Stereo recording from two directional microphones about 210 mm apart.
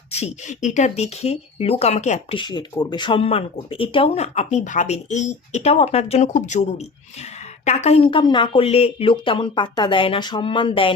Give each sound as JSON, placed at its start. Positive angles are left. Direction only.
{"t": 0.1, "sound": "speech", "side_deg": 30}
{"t": 2.4, "sound": "speech", "side_deg": 20}